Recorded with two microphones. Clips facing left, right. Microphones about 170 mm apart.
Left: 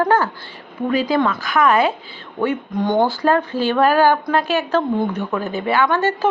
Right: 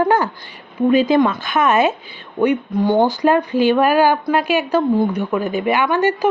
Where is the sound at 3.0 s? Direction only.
15° right (ahead or behind).